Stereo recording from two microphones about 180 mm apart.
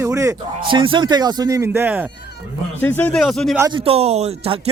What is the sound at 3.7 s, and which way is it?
Speech, 30° right (ahead or behind).